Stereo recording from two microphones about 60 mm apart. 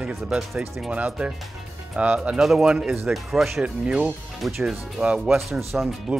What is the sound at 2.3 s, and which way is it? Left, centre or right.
Speech, centre.